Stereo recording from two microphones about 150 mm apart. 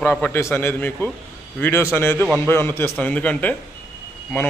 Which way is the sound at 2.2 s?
15° right (ahead or behind).